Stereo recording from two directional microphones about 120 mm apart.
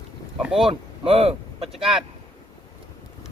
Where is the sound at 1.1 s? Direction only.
55° right (ahead or behind).